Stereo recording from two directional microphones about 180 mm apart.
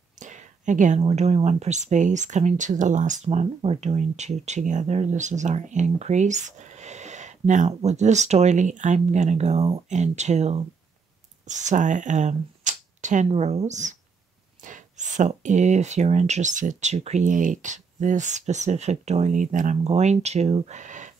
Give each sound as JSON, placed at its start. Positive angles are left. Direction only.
{"t": 0.2, "sound": "speech", "side_deg": -45}